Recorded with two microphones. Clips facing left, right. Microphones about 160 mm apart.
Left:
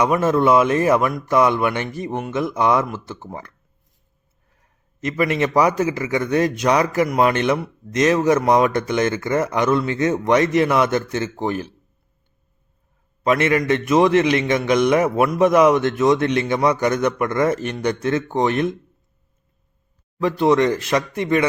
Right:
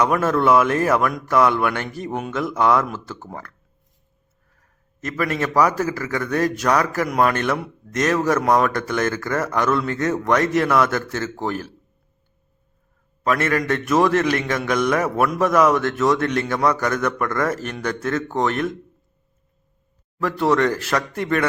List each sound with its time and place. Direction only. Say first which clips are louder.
0.0 s speech: left 2 dB; 10° left (ahead or behind)
5.1 s speech: left 2 dB; 15° left (ahead or behind)
7.1 s a man's voice: left 2 dB; 5° left (ahead or behind)
13.5 s speech: left 3 dB; 10° left (ahead or behind)
20.2 s speech: left 2 dB; 15° left (ahead or behind)